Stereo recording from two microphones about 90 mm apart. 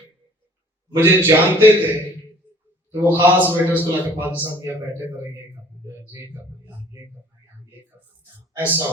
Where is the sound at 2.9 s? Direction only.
25° right (ahead or behind).